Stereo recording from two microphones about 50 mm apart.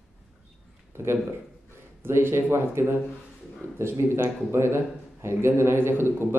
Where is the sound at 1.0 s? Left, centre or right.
Right.